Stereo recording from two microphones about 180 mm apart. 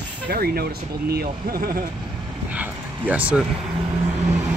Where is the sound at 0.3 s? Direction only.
60° right (ahead or behind).